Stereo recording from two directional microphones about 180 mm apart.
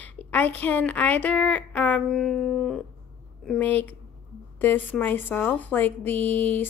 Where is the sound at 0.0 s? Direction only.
10° left (ahead or behind).